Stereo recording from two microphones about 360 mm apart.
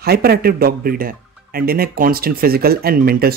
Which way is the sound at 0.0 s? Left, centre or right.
Right.